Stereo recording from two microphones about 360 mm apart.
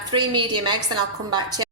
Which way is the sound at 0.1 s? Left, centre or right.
Centre.